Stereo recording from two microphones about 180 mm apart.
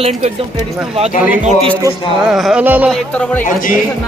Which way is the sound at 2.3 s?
5° right (ahead or behind).